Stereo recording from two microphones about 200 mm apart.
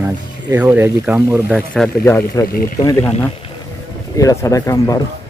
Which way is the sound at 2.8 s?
15° left (ahead or behind).